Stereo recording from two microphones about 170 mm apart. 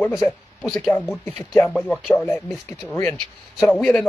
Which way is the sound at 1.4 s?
15° left (ahead or behind).